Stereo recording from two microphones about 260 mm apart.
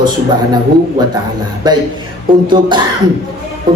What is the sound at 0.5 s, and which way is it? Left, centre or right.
Speech, centre.